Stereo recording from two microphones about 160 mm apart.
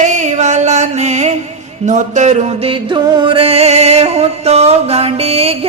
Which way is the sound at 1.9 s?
50° right (ahead or behind).